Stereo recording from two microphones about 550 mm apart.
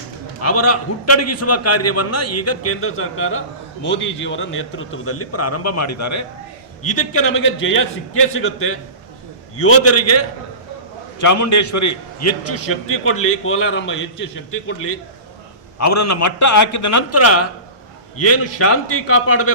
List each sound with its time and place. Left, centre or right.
0.4 s a man's voice: left